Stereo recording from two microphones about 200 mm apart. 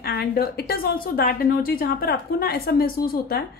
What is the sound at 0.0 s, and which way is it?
Speech, 50° left (ahead or behind).